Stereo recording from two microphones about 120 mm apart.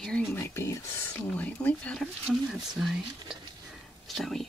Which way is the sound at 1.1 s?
10° left (ahead or behind).